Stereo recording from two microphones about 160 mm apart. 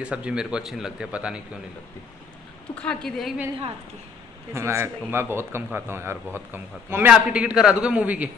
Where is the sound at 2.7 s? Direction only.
5° left (ahead or behind).